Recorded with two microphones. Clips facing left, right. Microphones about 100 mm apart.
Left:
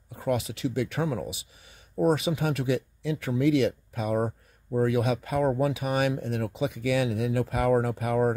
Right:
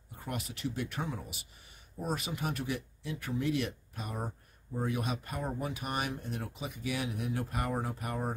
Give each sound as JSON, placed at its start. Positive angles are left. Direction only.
{"t": 0.1, "sound": "speech", "side_deg": 90}
{"t": 2.0, "sound": "speech", "side_deg": 75}